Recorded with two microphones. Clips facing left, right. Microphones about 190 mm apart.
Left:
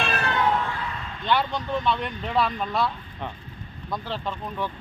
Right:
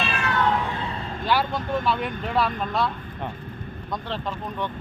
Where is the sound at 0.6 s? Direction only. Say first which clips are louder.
Right 1 dB; 25° right (ahead or behind).